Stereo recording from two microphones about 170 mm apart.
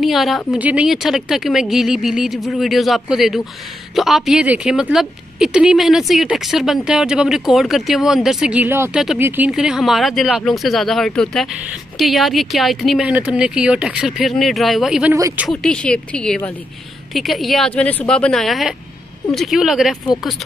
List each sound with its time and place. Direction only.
0.0 s a woman's voice: centre (ahead or behind)
15.1 s speech: 20° right (ahead or behind)
15.4 s a woman's voice: 5° left (ahead or behind)